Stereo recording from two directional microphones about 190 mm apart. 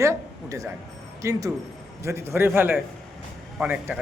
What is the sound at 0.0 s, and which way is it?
A man's voice, 15° right (ahead or behind).